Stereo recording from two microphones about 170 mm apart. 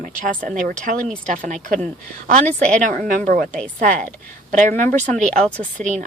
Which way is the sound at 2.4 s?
5° left (ahead or behind).